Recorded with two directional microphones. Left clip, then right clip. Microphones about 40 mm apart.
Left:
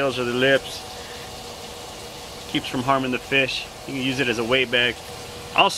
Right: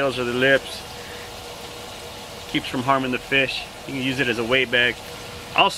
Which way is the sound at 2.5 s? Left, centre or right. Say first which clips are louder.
Right 1 dB; centre.